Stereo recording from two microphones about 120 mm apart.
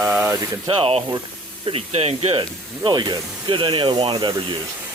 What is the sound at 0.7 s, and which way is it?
Speech, 55° right (ahead or behind).